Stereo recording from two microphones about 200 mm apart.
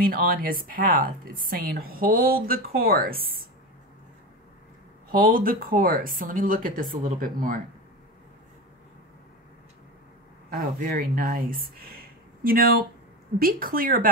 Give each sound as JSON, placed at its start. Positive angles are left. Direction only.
{"t": 0.0, "sound": "a woman's voice", "side_deg": -45}
{"t": 5.1, "sound": "a woman's voice", "side_deg": -45}
{"t": 10.5, "sound": "a woman's voice", "side_deg": -45}